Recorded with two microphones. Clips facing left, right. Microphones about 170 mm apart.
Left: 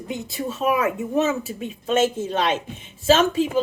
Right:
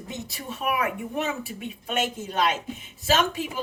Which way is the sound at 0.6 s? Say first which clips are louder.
Left 5 dB; 25° left (ahead or behind).